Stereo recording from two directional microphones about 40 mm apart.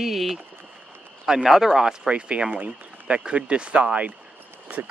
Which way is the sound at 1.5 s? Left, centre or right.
Centre.